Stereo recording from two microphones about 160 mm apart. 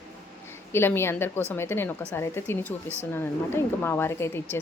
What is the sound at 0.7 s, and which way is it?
A woman's voice, 15° left (ahead or behind).